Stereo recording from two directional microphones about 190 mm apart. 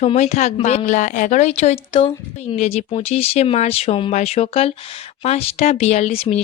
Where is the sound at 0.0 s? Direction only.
35° left (ahead or behind).